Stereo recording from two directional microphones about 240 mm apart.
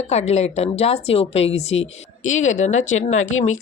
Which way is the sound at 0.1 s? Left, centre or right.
Left.